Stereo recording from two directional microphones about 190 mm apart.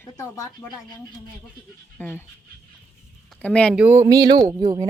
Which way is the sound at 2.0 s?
10° left (ahead or behind).